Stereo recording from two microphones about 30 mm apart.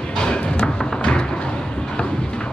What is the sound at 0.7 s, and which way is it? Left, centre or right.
Thump, centre.